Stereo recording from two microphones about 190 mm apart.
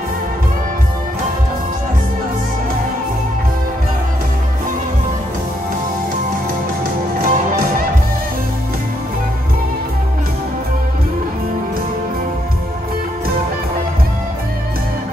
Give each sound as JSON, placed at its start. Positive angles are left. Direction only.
{"t": 7.2, "sound": "music", "side_deg": -50}